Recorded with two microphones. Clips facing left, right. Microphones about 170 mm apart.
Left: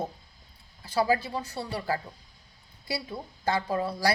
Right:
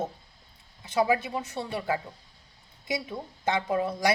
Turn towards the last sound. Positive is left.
turn(degrees=-20)  # may be behind; listen again after turning